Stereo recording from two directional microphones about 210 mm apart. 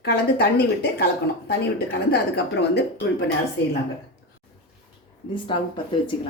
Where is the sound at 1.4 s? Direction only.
50° left (ahead or behind).